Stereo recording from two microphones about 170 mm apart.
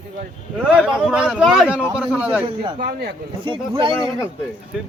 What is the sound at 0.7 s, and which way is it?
A man's voice, 5° right (ahead or behind).